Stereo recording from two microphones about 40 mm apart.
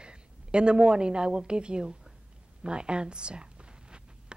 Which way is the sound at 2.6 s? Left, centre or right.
Right.